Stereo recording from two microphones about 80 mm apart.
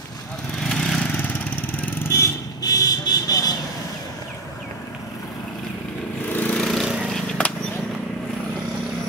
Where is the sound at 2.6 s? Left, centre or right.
Left.